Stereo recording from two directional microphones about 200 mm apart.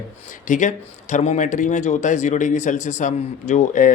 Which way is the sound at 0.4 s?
40° left (ahead or behind).